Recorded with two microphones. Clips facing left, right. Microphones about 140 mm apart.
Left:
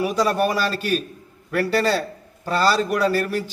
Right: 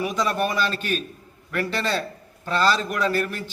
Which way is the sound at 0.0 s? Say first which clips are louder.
Left 4 dB; 35° left (ahead or behind).